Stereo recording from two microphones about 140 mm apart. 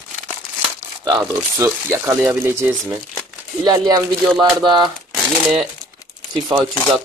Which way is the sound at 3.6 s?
25° right (ahead or behind).